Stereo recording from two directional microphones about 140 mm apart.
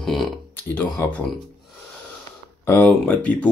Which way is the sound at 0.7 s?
15° left (ahead or behind).